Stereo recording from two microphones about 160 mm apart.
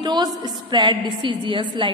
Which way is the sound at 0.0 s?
25° right (ahead or behind).